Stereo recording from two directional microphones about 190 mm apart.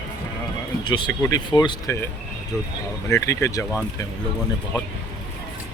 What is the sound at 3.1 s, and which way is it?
Speech, 15° left (ahead or behind).